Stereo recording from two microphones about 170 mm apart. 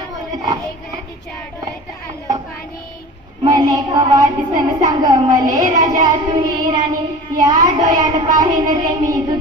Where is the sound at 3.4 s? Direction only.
25° right (ahead or behind).